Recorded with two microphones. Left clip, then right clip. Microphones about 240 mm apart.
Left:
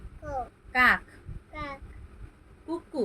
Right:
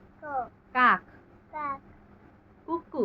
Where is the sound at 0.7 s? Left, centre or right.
Left.